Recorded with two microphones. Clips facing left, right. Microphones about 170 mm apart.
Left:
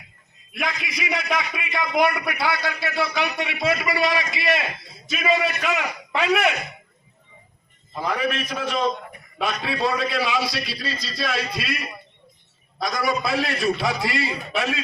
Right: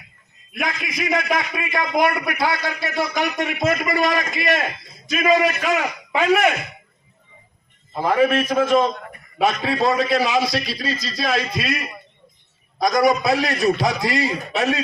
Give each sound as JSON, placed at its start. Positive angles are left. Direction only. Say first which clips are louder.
{"t": 0.5, "sound": "a man's voice", "louder": "right 2 dB", "side_deg": -50}
{"t": 8.0, "sound": "a man's voice", "louder": "right 8 dB", "side_deg": -45}
{"t": 12.8, "sound": "a man's voice", "louder": "right 7 dB", "side_deg": -40}